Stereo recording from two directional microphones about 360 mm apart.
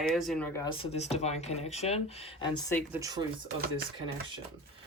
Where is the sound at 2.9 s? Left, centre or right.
Centre.